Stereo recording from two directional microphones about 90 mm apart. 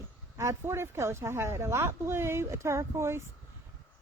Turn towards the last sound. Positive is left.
turn(degrees=-30)  # may be behind; listen again after turning